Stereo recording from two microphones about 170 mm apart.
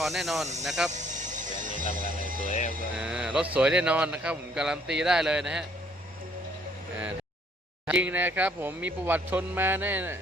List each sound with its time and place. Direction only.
0.0 s a man's voice: centre (ahead or behind)
0.9 s music: 45° right (ahead or behind)
2.5 s speech: 50° left (ahead or behind)
2.9 s a man's voice: 5° right (ahead or behind)
7.9 s speech: 5° right (ahead or behind)